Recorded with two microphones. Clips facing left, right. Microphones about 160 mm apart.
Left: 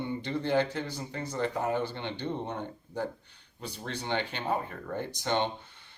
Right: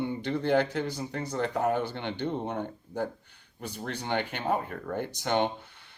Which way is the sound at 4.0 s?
15° right (ahead or behind).